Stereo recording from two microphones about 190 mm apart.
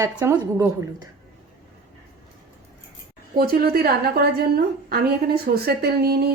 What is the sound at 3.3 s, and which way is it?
A woman's voice, 55° right (ahead or behind).